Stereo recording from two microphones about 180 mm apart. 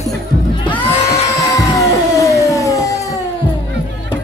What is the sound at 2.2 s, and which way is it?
Music, 20° left (ahead or behind).